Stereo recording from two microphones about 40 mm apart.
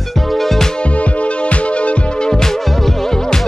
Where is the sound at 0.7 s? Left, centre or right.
Left.